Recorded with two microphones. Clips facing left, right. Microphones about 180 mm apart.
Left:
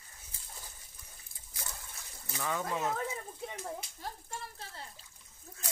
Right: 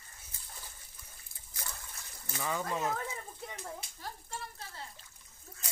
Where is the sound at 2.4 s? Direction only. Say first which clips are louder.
Even; centre (ahead or behind).